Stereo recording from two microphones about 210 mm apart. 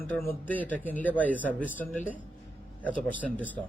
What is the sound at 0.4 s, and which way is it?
A man's voice, 5° left (ahead or behind).